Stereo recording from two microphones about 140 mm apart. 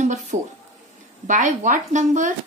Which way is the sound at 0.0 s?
60° right (ahead or behind).